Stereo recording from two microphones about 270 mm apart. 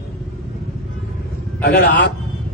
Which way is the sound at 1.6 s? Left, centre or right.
Left.